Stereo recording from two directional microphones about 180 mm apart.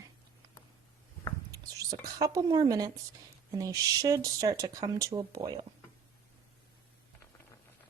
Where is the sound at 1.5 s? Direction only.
20° right (ahead or behind).